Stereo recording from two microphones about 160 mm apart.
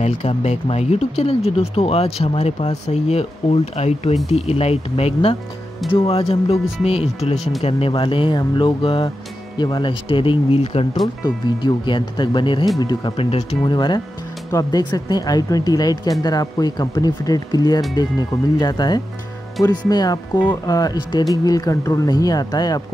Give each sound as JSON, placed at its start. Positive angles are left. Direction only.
{"t": 0.0, "sound": "speech", "side_deg": 45}
{"t": 13.7, "sound": "speech", "side_deg": 30}